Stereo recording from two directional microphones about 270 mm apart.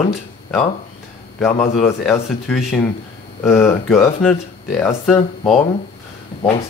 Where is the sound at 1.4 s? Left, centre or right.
Centre.